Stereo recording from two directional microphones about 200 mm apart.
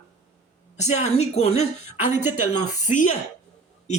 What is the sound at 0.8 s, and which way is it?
Speech, 35° left (ahead or behind).